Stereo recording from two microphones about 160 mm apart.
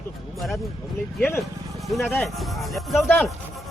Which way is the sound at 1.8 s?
Centre (ahead or behind).